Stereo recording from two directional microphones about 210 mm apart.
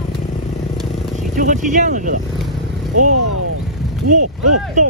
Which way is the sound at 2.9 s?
90° right.